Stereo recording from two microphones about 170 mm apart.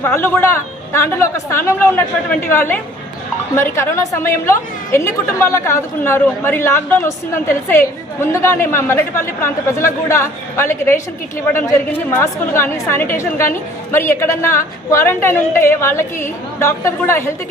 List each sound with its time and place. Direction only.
0.0 s a woman's voice: 15° left (ahead or behind)